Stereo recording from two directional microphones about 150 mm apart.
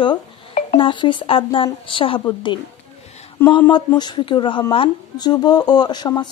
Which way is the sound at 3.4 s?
15° left (ahead or behind).